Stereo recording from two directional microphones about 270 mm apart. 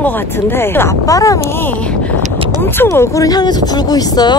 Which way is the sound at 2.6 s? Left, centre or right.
Centre.